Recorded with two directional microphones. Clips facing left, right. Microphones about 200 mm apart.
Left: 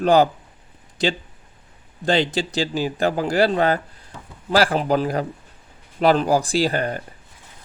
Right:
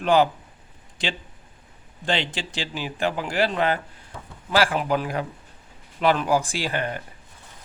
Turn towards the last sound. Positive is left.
turn(degrees=40)  # may be behind; listen again after turning